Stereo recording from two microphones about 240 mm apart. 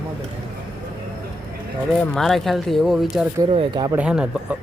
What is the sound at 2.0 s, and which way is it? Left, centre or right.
Speech, centre.